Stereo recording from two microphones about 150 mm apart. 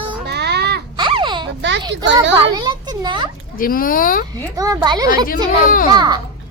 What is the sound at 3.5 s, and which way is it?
Speech, 70° left (ahead or behind).